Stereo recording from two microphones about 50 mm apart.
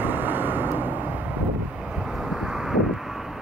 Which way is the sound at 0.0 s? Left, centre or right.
Right.